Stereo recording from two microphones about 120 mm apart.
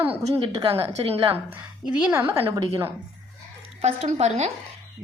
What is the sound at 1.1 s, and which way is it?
Speech, 45° right (ahead or behind).